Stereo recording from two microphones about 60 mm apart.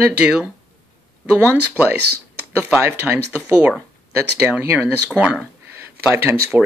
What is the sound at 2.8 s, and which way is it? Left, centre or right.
Speech, right.